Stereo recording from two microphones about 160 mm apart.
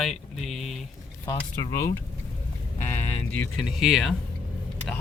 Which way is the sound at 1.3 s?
20° left (ahead or behind).